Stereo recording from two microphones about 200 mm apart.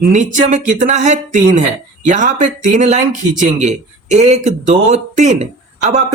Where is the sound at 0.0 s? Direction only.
40° right (ahead or behind).